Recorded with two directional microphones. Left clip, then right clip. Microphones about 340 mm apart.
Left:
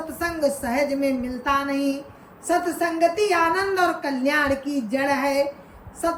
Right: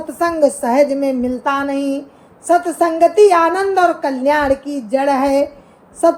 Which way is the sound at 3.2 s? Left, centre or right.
Centre.